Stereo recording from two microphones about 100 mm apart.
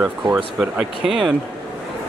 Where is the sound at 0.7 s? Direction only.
Centre (ahead or behind).